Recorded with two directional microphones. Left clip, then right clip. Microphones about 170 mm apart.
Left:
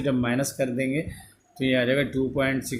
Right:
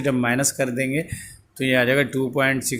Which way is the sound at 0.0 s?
25° right (ahead or behind).